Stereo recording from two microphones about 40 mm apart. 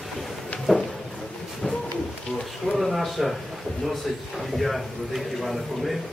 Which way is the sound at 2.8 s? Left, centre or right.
Centre.